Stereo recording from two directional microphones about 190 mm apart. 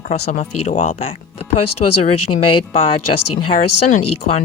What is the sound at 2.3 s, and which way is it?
Speech, 55° left (ahead or behind).